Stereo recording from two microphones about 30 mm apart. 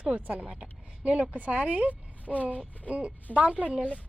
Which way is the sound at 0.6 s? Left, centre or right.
Right.